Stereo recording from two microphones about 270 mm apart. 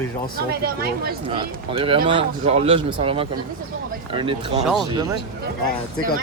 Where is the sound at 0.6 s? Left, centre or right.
Right.